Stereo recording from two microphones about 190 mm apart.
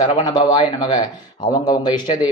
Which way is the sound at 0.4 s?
25° left (ahead or behind).